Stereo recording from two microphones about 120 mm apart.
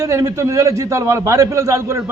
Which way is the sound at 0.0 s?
25° right (ahead or behind).